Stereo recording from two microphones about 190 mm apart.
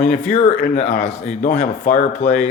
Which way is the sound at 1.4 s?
40° left (ahead or behind).